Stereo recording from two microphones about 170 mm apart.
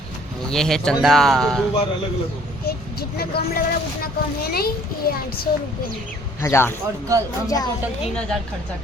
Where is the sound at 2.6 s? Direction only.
65° left (ahead or behind).